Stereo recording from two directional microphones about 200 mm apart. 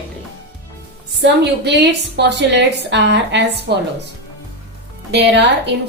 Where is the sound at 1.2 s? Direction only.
60° right (ahead or behind).